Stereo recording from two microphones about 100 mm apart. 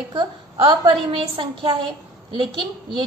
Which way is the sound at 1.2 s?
60° right (ahead or behind).